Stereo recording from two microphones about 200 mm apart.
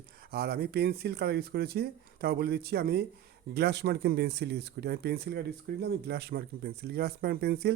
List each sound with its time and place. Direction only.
0.3 s speech: 50° right (ahead or behind)